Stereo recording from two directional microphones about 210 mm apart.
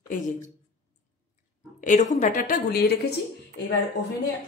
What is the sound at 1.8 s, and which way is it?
A woman's voice, 35° left (ahead or behind).